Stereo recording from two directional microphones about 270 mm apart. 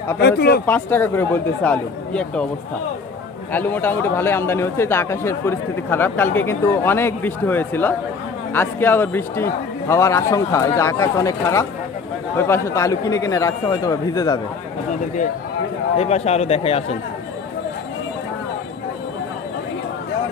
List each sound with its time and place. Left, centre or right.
0.2 s speech: left
0.7 s a man's voice: centre
3.5 s a man's voice: centre
16.0 s speech: left